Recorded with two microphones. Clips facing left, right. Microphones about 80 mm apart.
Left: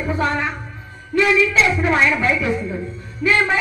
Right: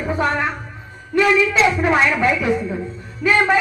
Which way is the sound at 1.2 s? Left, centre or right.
Right.